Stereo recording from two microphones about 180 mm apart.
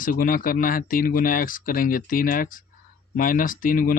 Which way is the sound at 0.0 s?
50° left (ahead or behind).